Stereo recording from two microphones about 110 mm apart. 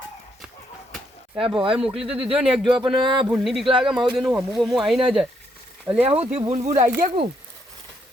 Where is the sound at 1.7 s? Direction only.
5° right (ahead or behind).